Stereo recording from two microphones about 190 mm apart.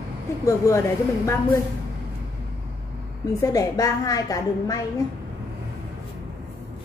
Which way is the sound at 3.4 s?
20° left (ahead or behind).